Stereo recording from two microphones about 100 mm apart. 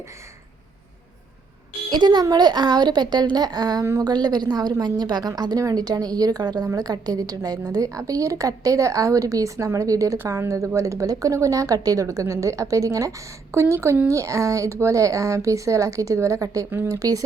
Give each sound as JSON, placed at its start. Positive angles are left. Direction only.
{"t": 1.9, "sound": "a woman's voice", "side_deg": -45}
{"t": 17.0, "sound": "a woman's voice", "side_deg": -35}